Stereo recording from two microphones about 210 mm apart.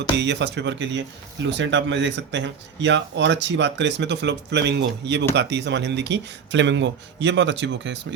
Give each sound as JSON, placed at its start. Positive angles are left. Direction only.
{"t": 0.2, "sound": "speech", "side_deg": -55}